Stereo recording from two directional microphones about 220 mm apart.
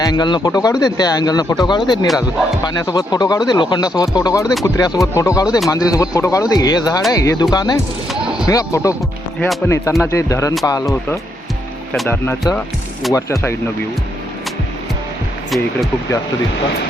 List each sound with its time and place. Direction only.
0.0 s speech: 20° left (ahead or behind)
2.8 s speech: 15° left (ahead or behind)
8.1 s a sound: 5° right (ahead or behind)
8.4 s speech: 15° left (ahead or behind)
15.4 s speech: centre (ahead or behind)